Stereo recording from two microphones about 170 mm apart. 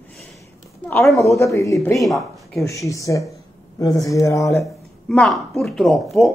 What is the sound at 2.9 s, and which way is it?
Speech, 20° left (ahead or behind).